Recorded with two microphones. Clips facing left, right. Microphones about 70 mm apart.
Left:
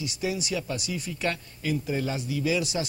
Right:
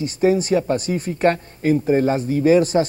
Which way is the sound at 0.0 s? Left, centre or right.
Right.